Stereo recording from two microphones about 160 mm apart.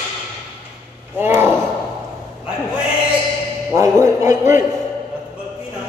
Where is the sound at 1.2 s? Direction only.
15° right (ahead or behind).